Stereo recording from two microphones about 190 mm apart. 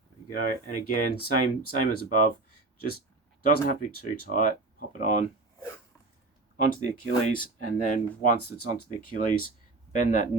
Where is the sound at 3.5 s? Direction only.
50° left (ahead or behind).